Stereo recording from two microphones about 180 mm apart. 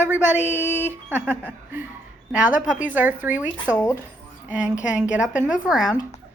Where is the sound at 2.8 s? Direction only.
10° right (ahead or behind).